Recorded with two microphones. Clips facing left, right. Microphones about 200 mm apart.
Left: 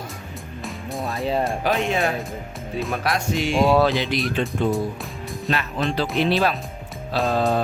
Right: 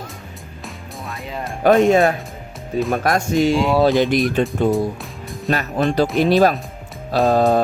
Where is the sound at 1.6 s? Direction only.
50° right (ahead or behind).